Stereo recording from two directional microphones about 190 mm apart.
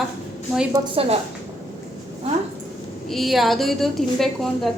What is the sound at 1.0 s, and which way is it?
Speech, 30° right (ahead or behind).